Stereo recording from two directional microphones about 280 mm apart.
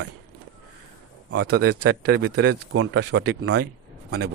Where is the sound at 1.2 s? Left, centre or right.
Right.